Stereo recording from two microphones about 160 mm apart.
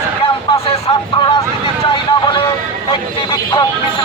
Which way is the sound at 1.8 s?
30° left (ahead or behind).